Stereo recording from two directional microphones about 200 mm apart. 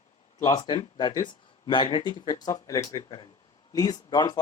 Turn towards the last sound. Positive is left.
turn(degrees=20)  # may be behind; listen again after turning